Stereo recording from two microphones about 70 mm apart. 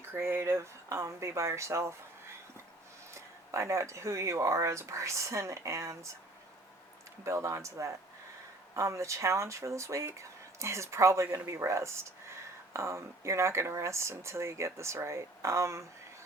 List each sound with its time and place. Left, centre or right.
0.0 s speech: right
3.2 s speech: right
7.3 s speech: right